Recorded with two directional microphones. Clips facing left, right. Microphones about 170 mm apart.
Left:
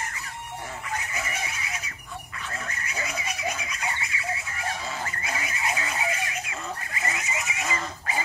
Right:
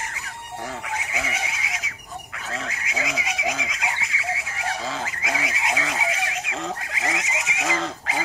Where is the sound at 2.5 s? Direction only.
90° right.